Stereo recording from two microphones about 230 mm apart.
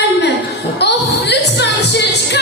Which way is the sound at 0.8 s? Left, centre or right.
Left.